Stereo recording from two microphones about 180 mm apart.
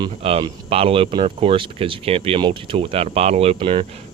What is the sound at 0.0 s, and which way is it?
Speech, 30° right (ahead or behind).